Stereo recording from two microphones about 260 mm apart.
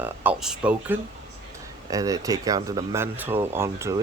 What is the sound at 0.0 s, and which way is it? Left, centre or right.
Speech, centre.